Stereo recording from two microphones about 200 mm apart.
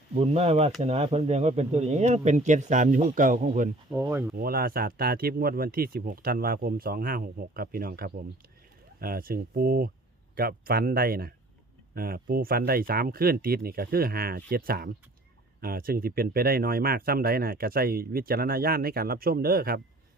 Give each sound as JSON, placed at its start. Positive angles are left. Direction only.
{"t": 0.1, "sound": "speech", "side_deg": -30}
{"t": 3.9, "sound": "speech", "side_deg": -15}
{"t": 4.4, "sound": "speech", "side_deg": -50}